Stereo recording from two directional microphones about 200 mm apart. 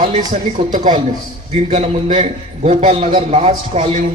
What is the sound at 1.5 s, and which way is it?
A man's voice, 30° right (ahead or behind).